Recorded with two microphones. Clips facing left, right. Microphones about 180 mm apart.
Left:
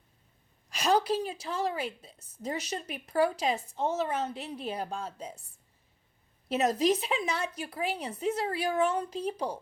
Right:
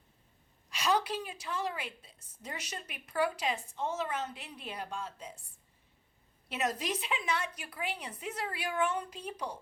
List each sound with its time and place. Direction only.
0.7 s a woman's voice: 40° left (ahead or behind)
6.5 s a woman's voice: 40° left (ahead or behind)